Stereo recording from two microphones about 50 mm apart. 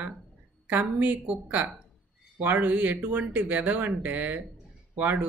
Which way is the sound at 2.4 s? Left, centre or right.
Right.